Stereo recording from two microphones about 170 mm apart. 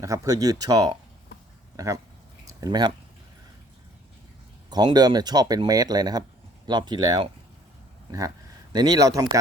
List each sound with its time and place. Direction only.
0.0 s speech: 20° right (ahead or behind)
4.7 s speech: 25° right (ahead or behind)
8.7 s speech: 25° right (ahead or behind)